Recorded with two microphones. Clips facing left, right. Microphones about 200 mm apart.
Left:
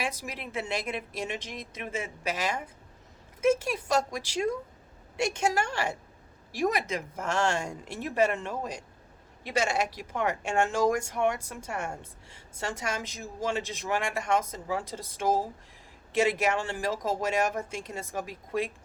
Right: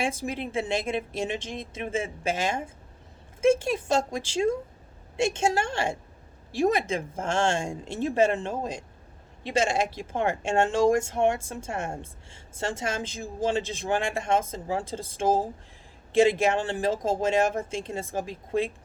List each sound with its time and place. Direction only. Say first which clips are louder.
0.0 s speech: right 6 dB; 25° right (ahead or behind)